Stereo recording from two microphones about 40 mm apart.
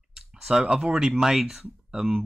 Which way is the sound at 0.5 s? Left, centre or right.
Centre.